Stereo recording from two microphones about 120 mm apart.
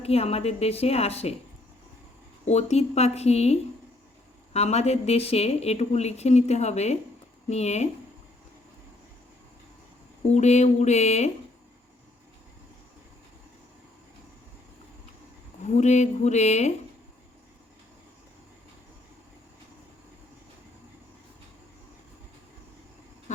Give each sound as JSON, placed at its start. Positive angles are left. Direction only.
{"t": 0.0, "sound": "a woman's voice", "side_deg": 55}
{"t": 2.5, "sound": "a woman's voice", "side_deg": 65}
{"t": 10.3, "sound": "speech", "side_deg": 70}
{"t": 15.6, "sound": "speech", "side_deg": 75}